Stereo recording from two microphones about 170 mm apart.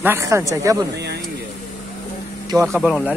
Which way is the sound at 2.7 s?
Centre (ahead or behind).